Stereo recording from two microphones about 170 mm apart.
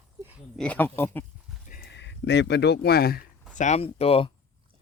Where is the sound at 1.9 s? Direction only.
90° left; by 3.2 s 65° left (ahead or behind).